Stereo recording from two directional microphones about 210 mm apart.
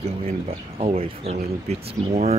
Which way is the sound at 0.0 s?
30° right (ahead or behind).